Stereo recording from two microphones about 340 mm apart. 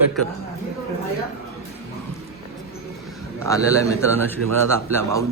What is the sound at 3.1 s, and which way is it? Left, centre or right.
A man's voice, centre.